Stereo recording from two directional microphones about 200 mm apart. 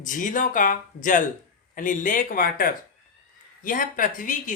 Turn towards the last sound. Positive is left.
turn(degrees=40)  # may be behind; listen again after turning